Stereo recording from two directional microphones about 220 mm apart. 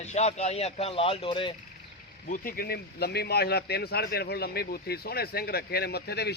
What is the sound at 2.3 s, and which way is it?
Speech, 40° left (ahead or behind).